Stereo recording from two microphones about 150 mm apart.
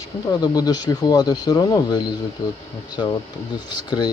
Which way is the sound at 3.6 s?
30° left (ahead or behind).